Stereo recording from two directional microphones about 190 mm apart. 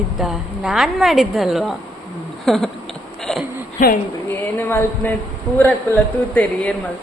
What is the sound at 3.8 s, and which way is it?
Speech, 40° left (ahead or behind).